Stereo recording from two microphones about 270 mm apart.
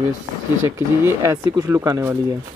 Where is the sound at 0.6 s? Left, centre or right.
Centre.